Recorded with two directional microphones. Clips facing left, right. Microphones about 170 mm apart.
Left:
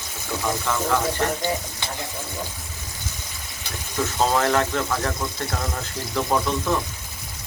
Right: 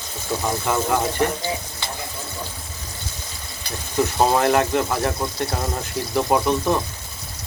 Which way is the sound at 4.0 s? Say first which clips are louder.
Right 3 dB; 15° right (ahead or behind).